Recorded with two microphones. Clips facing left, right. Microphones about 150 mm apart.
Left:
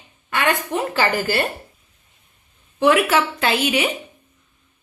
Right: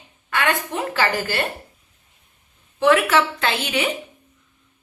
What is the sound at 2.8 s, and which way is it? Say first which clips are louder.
A woman's voice: even; 15° left (ahead or behind).